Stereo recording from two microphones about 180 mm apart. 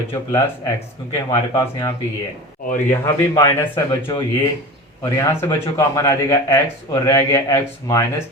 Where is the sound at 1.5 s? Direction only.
20° left (ahead or behind).